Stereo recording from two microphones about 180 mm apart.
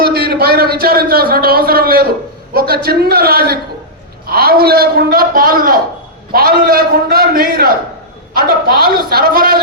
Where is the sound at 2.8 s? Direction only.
60° right (ahead or behind).